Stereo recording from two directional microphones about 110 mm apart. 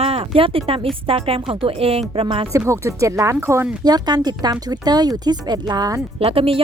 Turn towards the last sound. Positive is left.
turn(degrees=-60)  # may be behind; listen again after turning